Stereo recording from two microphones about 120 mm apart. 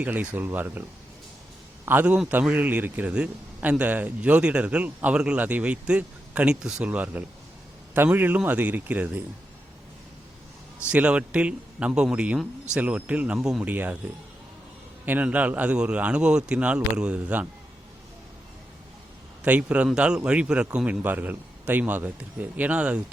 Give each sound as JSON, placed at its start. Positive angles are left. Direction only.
{"t": 0.0, "sound": "a man's voice", "side_deg": -10}
{"t": 10.8, "sound": "a man's voice", "side_deg": -10}
{"t": 15.0, "sound": "a man's voice", "side_deg": -15}
{"t": 19.5, "sound": "a man's voice", "side_deg": -10}